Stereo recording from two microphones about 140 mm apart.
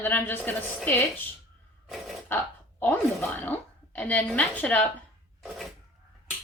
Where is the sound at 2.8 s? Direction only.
15° left (ahead or behind).